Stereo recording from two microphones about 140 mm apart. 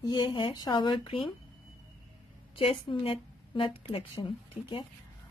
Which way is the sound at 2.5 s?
40° left (ahead or behind).